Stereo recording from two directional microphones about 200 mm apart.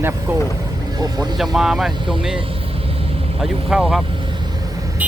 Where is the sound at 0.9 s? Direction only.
20° right (ahead or behind).